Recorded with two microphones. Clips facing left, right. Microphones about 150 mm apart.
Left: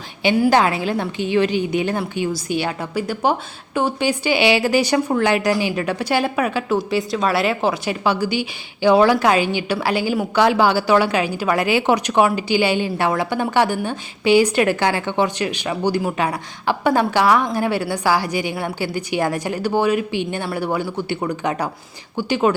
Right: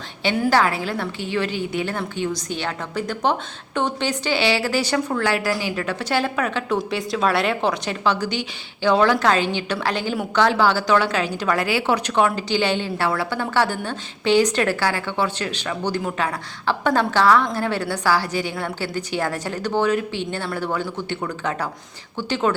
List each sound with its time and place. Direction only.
0.2 s a woman's voice: 10° left (ahead or behind)